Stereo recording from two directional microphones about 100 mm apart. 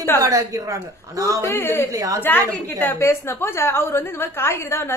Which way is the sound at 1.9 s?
35° right (ahead or behind).